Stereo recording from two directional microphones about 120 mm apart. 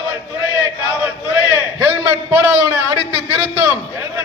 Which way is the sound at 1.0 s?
20° right (ahead or behind).